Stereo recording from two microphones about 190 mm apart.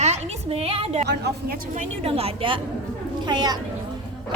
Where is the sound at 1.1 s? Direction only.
60° right (ahead or behind).